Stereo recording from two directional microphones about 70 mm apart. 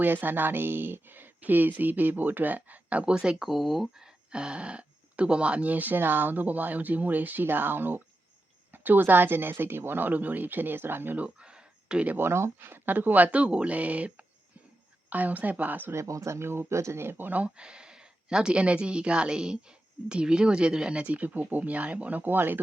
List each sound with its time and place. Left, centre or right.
0.0 s speech: right
11.3 s a sound: centre
12.0 s speech: right
15.9 s speech: right